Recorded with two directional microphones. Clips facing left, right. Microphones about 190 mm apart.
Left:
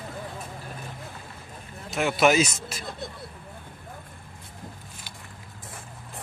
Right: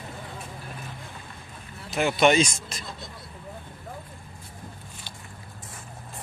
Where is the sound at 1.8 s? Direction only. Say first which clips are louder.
Right 1 dB; centre (ahead or behind).